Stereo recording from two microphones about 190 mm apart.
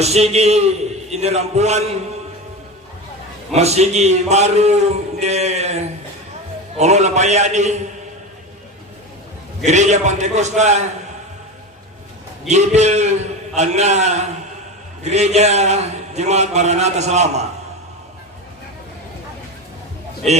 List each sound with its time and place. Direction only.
0.0 s a man's voice: 35° right (ahead or behind)
3.5 s a man's voice: 35° right (ahead or behind)
9.6 s a man's voice: 40° right (ahead or behind)
12.5 s a man's voice: 35° right (ahead or behind)